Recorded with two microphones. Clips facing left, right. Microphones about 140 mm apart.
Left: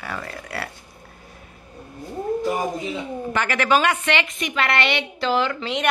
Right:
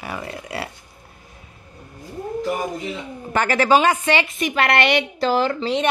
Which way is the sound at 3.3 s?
40° right (ahead or behind).